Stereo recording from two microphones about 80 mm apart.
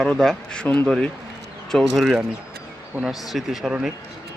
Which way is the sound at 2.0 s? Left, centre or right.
Centre.